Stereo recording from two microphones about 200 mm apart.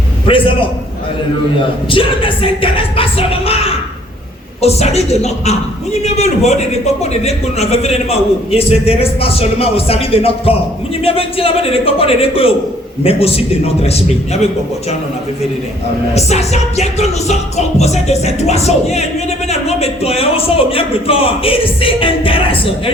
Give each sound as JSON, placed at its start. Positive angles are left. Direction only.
{"t": 0.3, "sound": "speech", "side_deg": 25}
{"t": 1.9, "sound": "a man's voice", "side_deg": 25}
{"t": 16.1, "sound": "a man's voice", "side_deg": 35}